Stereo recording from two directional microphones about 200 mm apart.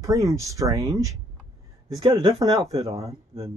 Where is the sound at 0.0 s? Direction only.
15° right (ahead or behind).